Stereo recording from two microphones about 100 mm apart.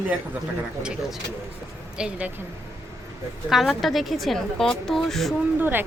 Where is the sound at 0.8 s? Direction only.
10° right (ahead or behind).